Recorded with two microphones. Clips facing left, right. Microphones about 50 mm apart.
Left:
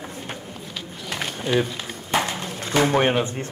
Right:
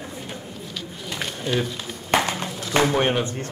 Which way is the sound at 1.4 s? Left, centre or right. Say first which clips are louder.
Left 3 dB; centre.